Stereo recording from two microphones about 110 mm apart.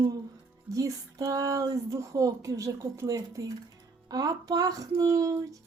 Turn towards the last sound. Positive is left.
turn(degrees=-30)  # may be behind; listen again after turning